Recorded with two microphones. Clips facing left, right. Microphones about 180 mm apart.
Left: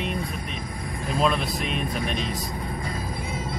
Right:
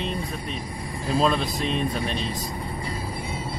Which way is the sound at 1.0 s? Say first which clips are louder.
Right 2 dB; 30° right (ahead or behind).